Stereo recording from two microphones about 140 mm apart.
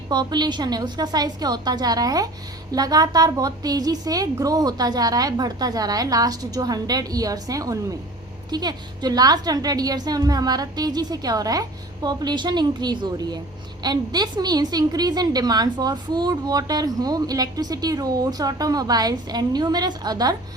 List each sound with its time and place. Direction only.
0.1 s a woman's voice: 30° right (ahead or behind)